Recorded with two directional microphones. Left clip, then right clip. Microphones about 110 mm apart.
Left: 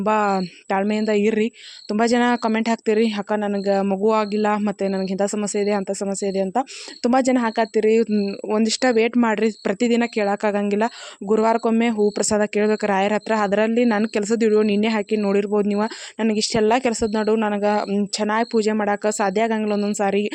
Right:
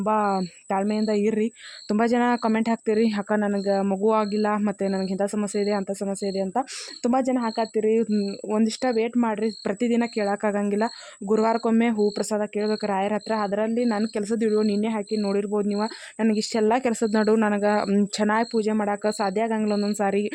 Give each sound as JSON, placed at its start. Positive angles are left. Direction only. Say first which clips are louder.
{"t": 0.0, "sound": "speech", "louder": "left 3 dB", "side_deg": 20}
{"t": 7.1, "sound": "speech", "louder": "left 5 dB", "side_deg": 35}
{"t": 12.1, "sound": "speech", "louder": "left 5 dB", "side_deg": 30}
{"t": 12.4, "sound": "speech", "louder": "left 6 dB", "side_deg": 40}
{"t": 16.2, "sound": "a man's voice", "louder": "left 3 dB", "side_deg": 20}
{"t": 18.5, "sound": "speech", "louder": "left 4 dB", "side_deg": 30}
{"t": 19.8, "sound": "speech", "louder": "left 3 dB", "side_deg": 10}